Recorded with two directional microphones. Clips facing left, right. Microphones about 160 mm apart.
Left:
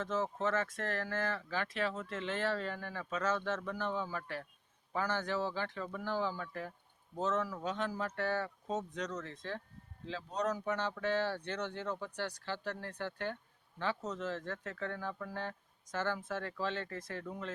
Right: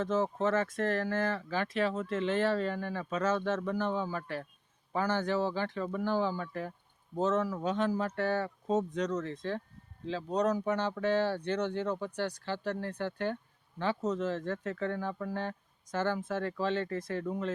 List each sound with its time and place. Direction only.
0.0 s speech: 25° right (ahead or behind)
6.1 s speech: 25° right (ahead or behind)